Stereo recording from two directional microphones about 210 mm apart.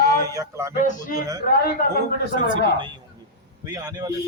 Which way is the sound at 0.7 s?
35° left (ahead or behind).